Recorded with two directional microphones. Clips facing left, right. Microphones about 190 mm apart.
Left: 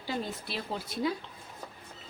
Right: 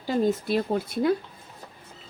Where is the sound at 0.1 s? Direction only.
45° right (ahead or behind).